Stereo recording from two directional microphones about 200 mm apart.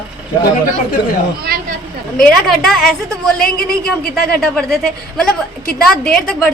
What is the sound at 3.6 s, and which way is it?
Speech, 50° left (ahead or behind).